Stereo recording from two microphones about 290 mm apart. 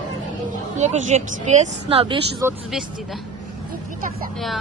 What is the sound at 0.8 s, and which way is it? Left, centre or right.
Speech, right.